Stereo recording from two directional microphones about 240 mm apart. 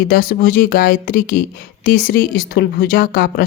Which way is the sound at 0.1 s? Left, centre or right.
Left.